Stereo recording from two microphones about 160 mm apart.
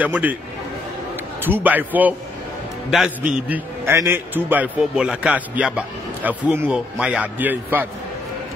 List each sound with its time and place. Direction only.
0.0 s a man's voice: 10° right (ahead or behind)
1.4 s a man's voice: 10° right (ahead or behind)